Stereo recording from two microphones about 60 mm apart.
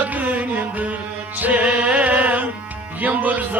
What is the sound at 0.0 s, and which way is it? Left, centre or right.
Music, right.